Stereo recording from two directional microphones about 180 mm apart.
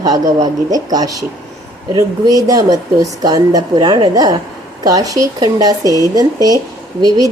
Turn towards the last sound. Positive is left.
turn(degrees=-20)  # may be behind; listen again after turning